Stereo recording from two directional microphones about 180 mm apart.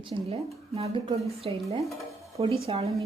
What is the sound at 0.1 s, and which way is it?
A woman's voice, 25° right (ahead or behind).